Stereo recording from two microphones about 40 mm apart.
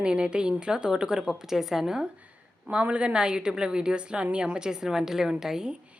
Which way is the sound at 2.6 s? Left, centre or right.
Right.